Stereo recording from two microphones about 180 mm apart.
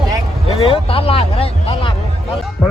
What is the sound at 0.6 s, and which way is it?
Speech, 30° left (ahead or behind).